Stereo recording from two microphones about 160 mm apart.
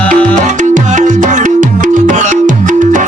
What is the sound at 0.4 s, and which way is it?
Music, 50° right (ahead or behind).